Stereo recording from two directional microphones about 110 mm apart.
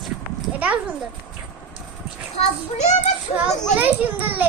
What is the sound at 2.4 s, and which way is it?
Speech, 90° left.